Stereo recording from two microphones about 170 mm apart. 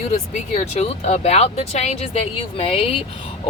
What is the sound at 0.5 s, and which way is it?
Speech, 40° left (ahead or behind).